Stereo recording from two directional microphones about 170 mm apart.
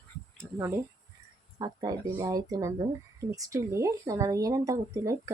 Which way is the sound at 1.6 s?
25° right (ahead or behind).